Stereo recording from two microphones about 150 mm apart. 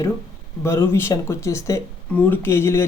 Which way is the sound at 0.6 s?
15° left (ahead or behind).